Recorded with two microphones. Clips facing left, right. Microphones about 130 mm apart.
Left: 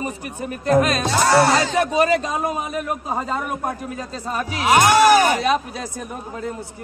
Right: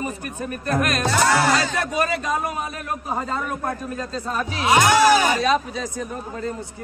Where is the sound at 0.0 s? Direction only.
20° left (ahead or behind).